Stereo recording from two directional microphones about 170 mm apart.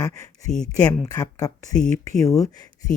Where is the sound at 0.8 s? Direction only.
20° left (ahead or behind).